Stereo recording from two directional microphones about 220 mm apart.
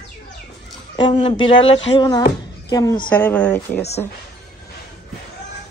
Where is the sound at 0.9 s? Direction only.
20° left (ahead or behind).